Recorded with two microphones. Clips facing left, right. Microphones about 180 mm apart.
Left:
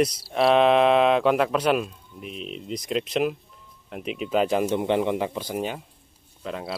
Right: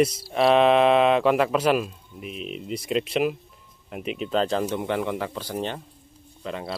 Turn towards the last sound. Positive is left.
turn(degrees=0)  # may be behind; listen again after turning